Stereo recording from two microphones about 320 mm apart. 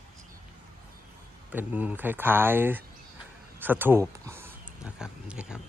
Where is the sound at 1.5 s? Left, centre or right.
Centre.